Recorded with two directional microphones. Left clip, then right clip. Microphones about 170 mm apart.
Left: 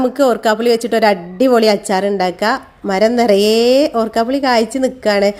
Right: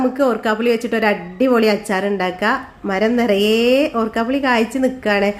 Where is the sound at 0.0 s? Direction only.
45° left (ahead or behind).